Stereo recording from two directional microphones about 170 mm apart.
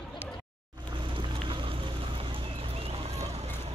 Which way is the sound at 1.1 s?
30° right (ahead or behind).